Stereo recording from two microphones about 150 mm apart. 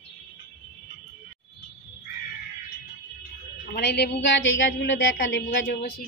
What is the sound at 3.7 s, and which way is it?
Speech, 90° left.